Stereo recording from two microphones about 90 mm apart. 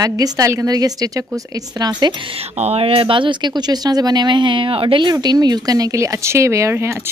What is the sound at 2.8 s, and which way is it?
A woman's voice, 90° right.